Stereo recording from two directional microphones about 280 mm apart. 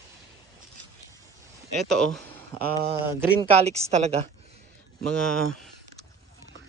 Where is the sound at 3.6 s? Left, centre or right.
Right.